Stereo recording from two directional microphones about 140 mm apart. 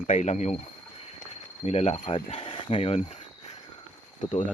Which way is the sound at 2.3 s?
40° left (ahead or behind).